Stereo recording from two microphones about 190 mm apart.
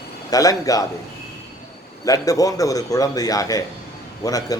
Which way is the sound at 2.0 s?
20° left (ahead or behind).